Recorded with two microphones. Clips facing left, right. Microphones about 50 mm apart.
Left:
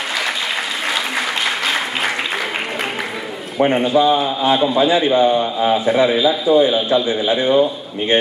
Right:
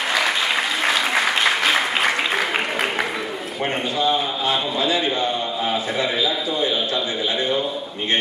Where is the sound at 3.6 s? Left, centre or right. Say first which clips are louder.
Left 10 dB; centre.